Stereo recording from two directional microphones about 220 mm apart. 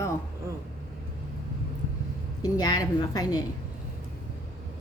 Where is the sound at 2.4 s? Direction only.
15° left (ahead or behind).